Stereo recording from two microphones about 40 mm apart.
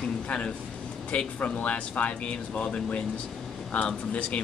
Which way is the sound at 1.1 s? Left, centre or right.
Left.